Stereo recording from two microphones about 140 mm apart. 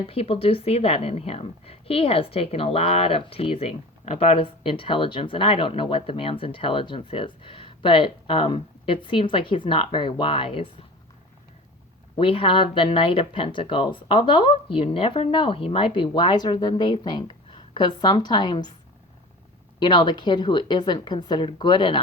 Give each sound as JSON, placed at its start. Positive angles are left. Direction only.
{"t": 0.1, "sound": "a woman's voice", "side_deg": 45}
{"t": 12.1, "sound": "a woman's voice", "side_deg": 40}
{"t": 19.8, "sound": "a woman's voice", "side_deg": 35}